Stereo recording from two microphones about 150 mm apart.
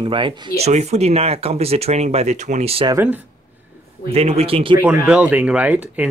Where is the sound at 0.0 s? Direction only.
35° right (ahead or behind).